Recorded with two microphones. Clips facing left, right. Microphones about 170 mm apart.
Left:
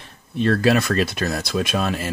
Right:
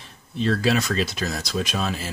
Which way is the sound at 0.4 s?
55° left (ahead or behind).